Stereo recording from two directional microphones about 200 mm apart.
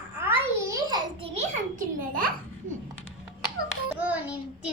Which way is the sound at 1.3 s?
40° right (ahead or behind).